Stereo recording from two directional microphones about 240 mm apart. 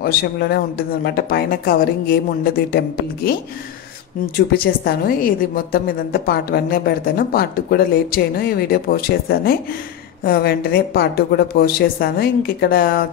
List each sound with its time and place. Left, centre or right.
0.0 s a woman's voice: left
4.6 s a woman's voice: left